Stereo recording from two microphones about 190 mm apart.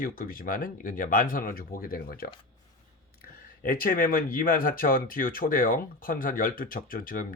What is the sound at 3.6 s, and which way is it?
Speech, 50° left (ahead or behind).